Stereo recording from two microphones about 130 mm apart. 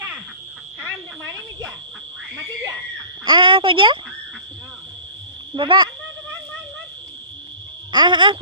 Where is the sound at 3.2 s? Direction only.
40° right (ahead or behind).